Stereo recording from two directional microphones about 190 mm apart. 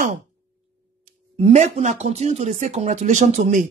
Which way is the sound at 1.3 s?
35° right (ahead or behind).